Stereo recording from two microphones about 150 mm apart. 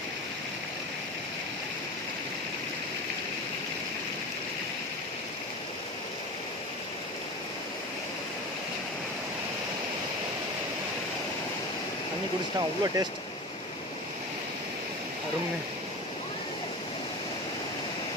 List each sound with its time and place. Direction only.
12.5 s speech: 25° right (ahead or behind)